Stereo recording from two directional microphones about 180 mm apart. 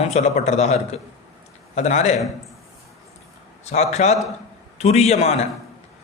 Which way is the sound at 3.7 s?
40° left (ahead or behind).